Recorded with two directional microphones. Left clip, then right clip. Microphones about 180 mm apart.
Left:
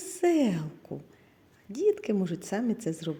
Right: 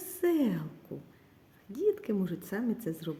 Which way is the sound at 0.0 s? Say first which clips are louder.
Left 4 dB; 30° left (ahead or behind).